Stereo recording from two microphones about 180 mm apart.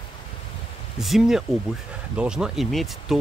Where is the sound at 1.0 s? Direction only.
Centre (ahead or behind).